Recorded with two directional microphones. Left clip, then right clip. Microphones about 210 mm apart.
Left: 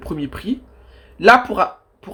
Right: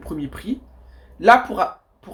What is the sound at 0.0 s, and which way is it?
Speech, 35° left (ahead or behind).